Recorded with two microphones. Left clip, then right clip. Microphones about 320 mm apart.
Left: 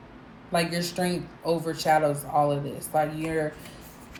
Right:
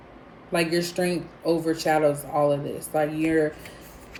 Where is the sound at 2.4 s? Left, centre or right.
Left.